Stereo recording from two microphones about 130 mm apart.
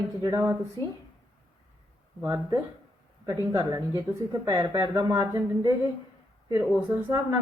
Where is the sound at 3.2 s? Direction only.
30° right (ahead or behind).